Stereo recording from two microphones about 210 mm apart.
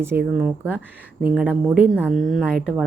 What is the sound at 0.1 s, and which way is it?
Speech, 45° right (ahead or behind).